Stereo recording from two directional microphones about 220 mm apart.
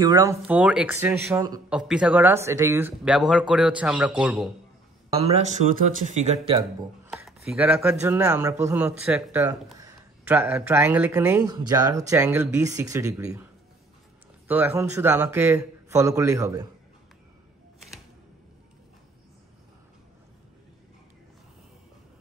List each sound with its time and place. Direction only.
0.0 s speech: 15° right (ahead or behind)
3.0 s a man's voice: centre (ahead or behind)
5.1 s speech: 30° right (ahead or behind)
7.2 s speech: 5° right (ahead or behind)
14.5 s speech: 10° right (ahead or behind)